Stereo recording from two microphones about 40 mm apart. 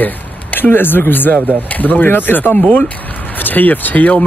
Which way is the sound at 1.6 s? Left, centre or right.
Left.